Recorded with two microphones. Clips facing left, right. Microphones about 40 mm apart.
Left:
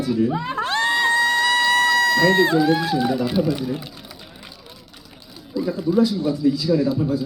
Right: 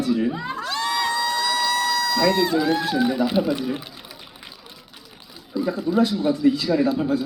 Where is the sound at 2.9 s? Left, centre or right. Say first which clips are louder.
Even; centre.